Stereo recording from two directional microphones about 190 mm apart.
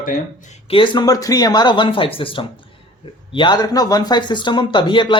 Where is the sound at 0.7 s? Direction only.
25° left (ahead or behind).